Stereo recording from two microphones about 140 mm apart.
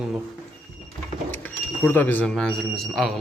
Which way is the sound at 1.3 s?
15° left (ahead or behind).